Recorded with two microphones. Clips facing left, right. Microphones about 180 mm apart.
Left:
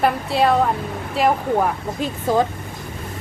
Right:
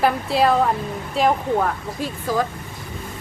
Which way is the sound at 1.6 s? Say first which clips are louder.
Left 2 dB; 15° left (ahead or behind).